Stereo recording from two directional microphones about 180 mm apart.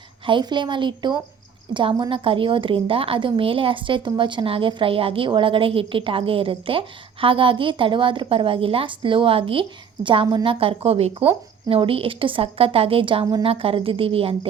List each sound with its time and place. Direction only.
0.3 s a woman's voice: 25° right (ahead or behind)